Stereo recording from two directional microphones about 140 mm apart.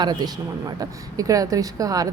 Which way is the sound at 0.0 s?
30° right (ahead or behind).